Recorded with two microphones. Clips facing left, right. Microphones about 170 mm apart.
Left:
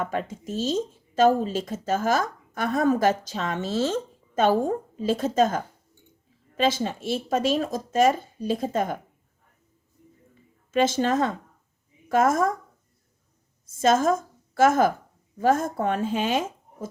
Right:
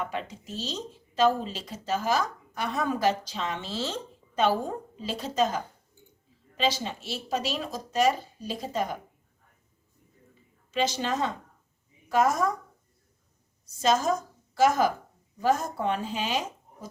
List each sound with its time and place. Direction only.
0.0 s speech: 45° left (ahead or behind)
10.7 s speech: 50° left (ahead or behind)
13.7 s a woman's voice: 50° left (ahead or behind)